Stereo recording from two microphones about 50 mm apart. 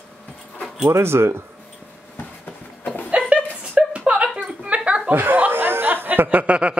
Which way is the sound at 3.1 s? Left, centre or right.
Right.